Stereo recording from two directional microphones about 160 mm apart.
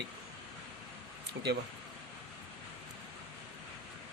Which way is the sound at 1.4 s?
90° right.